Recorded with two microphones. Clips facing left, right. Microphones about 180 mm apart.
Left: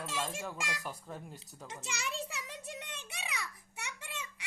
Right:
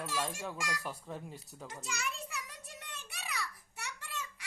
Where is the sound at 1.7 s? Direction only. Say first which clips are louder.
Left 1 dB; 25° left (ahead or behind).